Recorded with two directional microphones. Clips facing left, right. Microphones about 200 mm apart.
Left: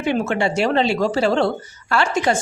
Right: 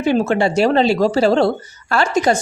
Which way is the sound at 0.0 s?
35° right (ahead or behind).